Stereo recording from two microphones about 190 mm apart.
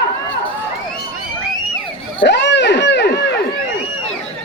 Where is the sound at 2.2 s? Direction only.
65° left (ahead or behind).